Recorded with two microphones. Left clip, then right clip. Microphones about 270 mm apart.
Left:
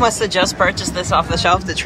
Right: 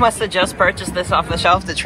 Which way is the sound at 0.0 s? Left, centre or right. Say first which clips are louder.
Even; centre.